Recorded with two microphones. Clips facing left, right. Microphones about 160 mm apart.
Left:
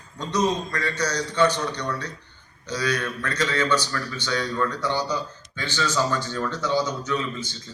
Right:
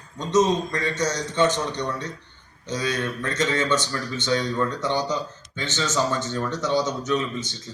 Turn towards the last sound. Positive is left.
turn(degrees=-20)  # may be behind; listen again after turning